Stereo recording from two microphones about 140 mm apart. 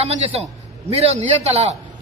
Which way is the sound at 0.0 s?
50° right (ahead or behind).